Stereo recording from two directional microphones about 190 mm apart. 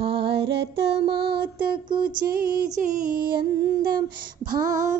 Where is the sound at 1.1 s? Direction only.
60° right (ahead or behind).